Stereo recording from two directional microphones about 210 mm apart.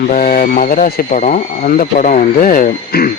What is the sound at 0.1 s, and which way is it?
Speech, 40° left (ahead or behind).